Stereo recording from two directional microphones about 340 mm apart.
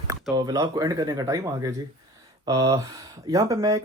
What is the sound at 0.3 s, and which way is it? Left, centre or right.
Speech, centre.